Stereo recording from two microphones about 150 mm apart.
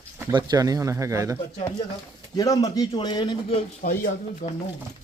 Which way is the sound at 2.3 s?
25° left (ahead or behind).